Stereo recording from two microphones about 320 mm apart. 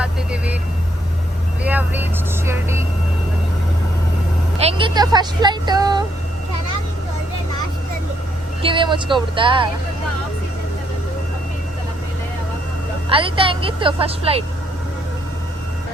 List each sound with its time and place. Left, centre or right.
0.0 s vehicle: centre
1.6 s vehicle: centre
4.5 s music: centre
8.6 s speech: centre
13.1 s a woman's voice: centre